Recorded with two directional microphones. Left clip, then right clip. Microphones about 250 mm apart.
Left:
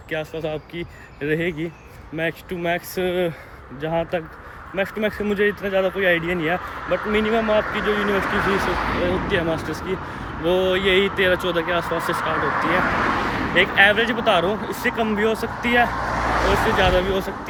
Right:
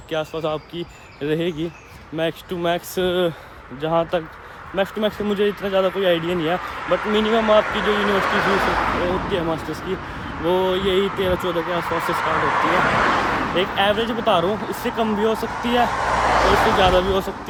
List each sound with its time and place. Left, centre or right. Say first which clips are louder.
0.4 s speech: right 3 dB; centre
7.9 s speech: right 2 dB; right
9.3 s speech: left 1 dB; centre; by 13.4 s right
13.6 s speech: left 6 dB; centre
15.9 s vehicle: right 4 dB; right
16.3 s speech: right 2 dB; right
16.8 s speech: right 2 dB; centre